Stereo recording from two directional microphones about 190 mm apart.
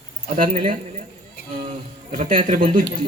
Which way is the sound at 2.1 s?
45° right (ahead or behind).